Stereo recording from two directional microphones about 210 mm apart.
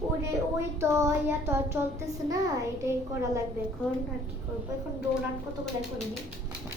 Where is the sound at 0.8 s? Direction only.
15° right (ahead or behind).